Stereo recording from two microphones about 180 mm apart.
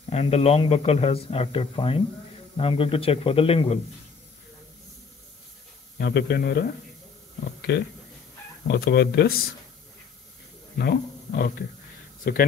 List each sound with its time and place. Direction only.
0.1 s speech: 35° left (ahead or behind)
5.9 s speech: 60° left (ahead or behind)
10.8 s speech: 60° left (ahead or behind)